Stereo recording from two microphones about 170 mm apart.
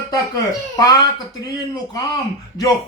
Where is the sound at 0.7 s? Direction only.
20° left (ahead or behind).